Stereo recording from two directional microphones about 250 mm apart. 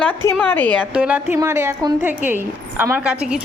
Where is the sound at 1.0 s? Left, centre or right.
Centre.